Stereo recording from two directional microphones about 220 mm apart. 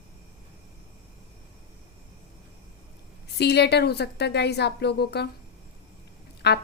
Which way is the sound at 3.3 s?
50° left (ahead or behind).